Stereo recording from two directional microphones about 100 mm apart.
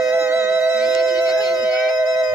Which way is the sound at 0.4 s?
15° right (ahead or behind).